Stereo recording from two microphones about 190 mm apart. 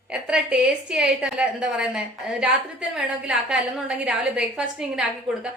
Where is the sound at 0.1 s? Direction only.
5° right (ahead or behind).